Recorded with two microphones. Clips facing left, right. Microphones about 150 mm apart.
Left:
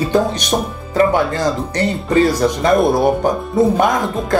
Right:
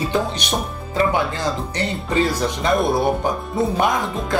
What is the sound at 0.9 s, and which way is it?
Speech, 45° left (ahead or behind).